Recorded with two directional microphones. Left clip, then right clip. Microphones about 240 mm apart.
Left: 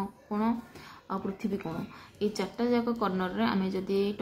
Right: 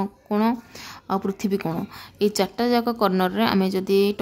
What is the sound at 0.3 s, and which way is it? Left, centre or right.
A woman's voice, right.